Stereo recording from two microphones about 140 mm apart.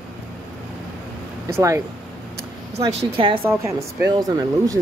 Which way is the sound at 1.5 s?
20° right (ahead or behind).